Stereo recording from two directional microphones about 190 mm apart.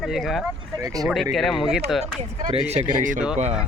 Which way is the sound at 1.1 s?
Centre (ahead or behind).